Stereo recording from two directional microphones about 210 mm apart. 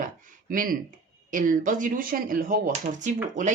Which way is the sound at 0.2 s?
40° right (ahead or behind).